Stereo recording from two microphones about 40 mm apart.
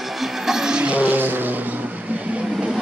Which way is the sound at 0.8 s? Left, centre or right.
Right.